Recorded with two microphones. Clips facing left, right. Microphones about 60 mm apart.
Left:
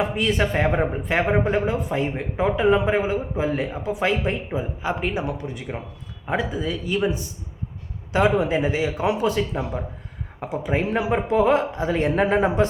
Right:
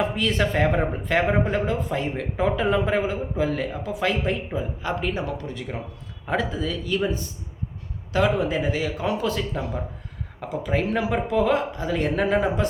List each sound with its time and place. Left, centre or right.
0.2 s speech: centre
8.1 s speech: left